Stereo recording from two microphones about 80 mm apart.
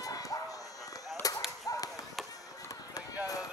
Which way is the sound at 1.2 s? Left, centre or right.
Left.